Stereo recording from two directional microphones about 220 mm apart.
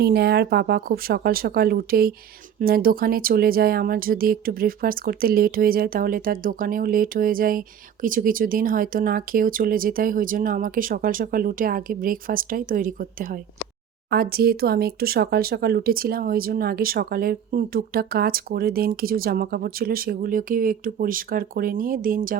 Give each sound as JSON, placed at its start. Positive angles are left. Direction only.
{"t": 0.0, "sound": "speech", "side_deg": -45}